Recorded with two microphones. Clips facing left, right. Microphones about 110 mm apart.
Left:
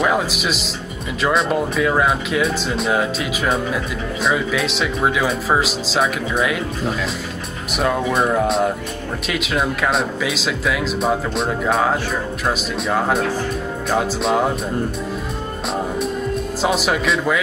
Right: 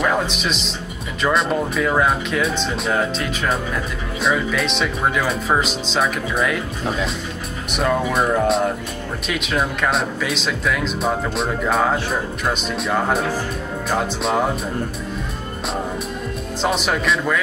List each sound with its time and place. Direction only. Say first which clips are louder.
0.0 s speech: left 1 dB; 5° left (ahead or behind)
7.7 s speech: left 1 dB; centre (ahead or behind)
16.6 s speech: left 1 dB; 5° left (ahead or behind)